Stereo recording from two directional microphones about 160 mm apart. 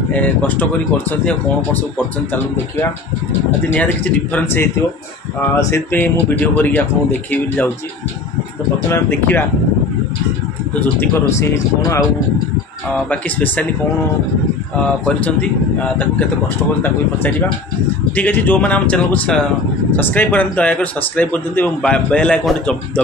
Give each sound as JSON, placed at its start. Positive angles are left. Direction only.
{"t": 0.1, "sound": "speech", "side_deg": 10}
{"t": 3.7, "sound": "speech", "side_deg": 10}
{"t": 8.7, "sound": "speech", "side_deg": 15}
{"t": 10.7, "sound": "speech", "side_deg": 15}
{"t": 13.1, "sound": "speech", "side_deg": 10}
{"t": 15.0, "sound": "speech", "side_deg": 5}
{"t": 18.1, "sound": "speech", "side_deg": 10}